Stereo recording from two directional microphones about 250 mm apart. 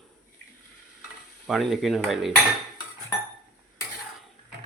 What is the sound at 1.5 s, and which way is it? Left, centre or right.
Speech, centre.